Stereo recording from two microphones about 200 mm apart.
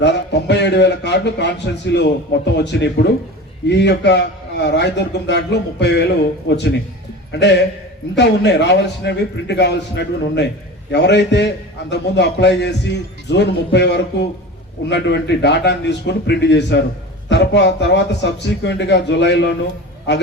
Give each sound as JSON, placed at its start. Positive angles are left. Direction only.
{"t": 0.0, "sound": "a man's voice", "side_deg": 60}